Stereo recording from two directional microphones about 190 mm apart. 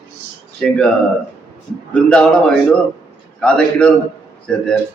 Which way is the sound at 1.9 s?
5° left (ahead or behind).